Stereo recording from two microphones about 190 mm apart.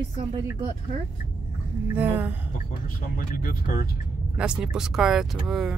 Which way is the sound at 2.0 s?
10° right (ahead or behind).